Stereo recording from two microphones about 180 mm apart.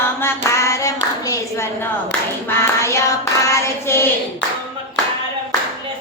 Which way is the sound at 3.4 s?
15° left (ahead or behind).